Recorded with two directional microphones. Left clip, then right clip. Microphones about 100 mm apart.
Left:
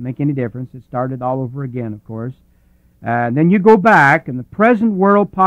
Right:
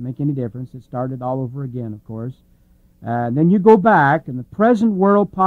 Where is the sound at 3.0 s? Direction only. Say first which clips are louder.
Left 3 dB; 45° left (ahead or behind).